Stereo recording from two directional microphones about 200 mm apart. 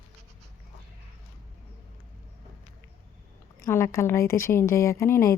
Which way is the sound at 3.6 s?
15° left (ahead or behind).